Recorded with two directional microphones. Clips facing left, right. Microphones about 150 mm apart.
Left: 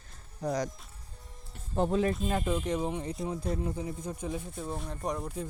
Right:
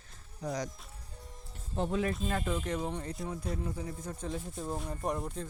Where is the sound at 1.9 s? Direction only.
30° left (ahead or behind).